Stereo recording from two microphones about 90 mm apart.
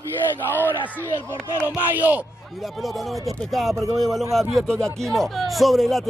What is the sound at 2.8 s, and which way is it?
A man's voice, centre (ahead or behind).